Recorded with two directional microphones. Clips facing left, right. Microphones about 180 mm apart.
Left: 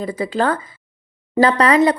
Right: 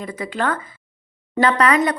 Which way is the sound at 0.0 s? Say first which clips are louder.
Left 5 dB; 30° left (ahead or behind).